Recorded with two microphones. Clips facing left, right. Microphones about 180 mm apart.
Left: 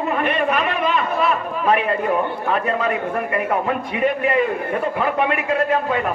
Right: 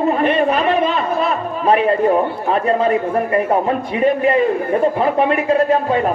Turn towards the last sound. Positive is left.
turn(degrees=-35)  # may be behind; listen again after turning